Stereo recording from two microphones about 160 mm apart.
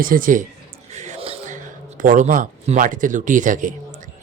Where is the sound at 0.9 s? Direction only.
45° right (ahead or behind).